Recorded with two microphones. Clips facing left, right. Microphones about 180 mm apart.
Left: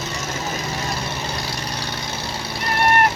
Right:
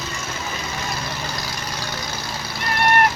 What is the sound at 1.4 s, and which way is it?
Cat, 30° left (ahead or behind).